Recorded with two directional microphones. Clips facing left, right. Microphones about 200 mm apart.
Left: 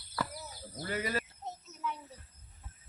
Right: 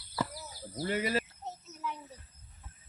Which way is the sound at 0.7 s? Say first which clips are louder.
Right 4 dB; 25° right (ahead or behind).